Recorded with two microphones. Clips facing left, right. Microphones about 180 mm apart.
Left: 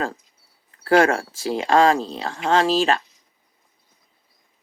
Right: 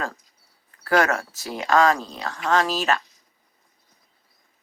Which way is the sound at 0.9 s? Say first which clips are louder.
Left 4 dB; 30° left (ahead or behind).